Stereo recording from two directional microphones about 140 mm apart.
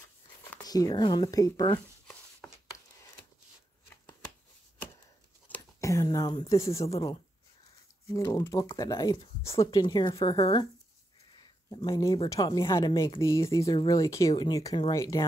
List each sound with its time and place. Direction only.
0.6 s speech: 25° left (ahead or behind)
2.4 s chopping: 5° left (ahead or behind)
5.8 s speech: 20° left (ahead or behind)
8.1 s speech: 25° left (ahead or behind)
11.7 s speech: 25° left (ahead or behind)